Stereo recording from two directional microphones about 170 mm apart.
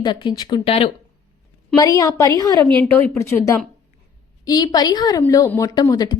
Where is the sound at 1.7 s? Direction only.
20° left (ahead or behind).